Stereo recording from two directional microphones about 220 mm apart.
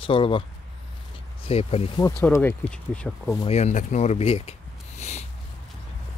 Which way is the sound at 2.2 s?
10° left (ahead or behind).